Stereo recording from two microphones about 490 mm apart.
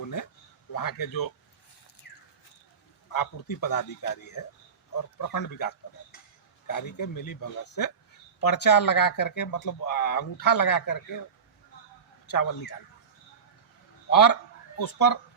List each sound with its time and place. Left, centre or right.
0.7 s a man's voice: left
3.1 s a man's voice: left
12.3 s speech: left
14.1 s a man's voice: left